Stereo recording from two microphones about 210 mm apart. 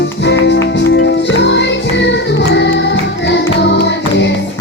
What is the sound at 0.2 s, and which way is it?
Music, 55° left (ahead or behind).